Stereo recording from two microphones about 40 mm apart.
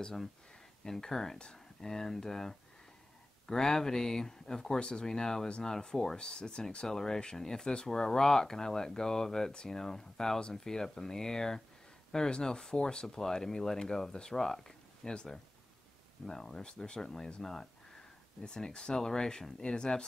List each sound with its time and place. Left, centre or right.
0.0 s speech: centre
16.3 s speech: centre